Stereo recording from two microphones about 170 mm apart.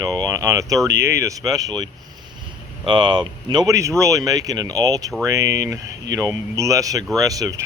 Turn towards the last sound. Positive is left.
turn(degrees=-20)  # may be behind; listen again after turning